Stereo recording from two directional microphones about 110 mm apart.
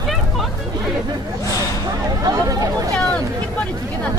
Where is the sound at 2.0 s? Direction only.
30° right (ahead or behind).